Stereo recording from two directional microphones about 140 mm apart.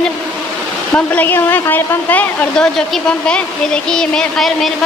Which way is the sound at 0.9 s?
15° left (ahead or behind).